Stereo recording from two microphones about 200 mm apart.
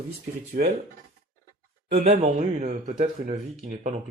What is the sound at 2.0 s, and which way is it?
Speech, 30° right (ahead or behind).